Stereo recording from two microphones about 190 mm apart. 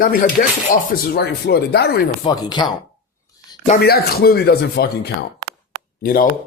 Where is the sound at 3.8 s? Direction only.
55° left (ahead or behind).